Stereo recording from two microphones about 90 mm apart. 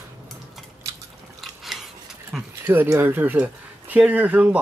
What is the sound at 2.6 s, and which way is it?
Speech, 25° right (ahead or behind).